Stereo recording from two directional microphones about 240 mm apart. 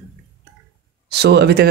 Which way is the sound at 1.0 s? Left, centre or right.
Right.